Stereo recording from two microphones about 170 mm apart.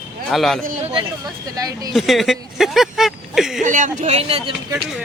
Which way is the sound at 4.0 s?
40° right (ahead or behind).